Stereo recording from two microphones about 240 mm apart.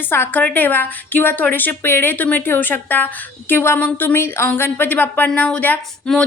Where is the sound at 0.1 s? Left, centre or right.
Centre.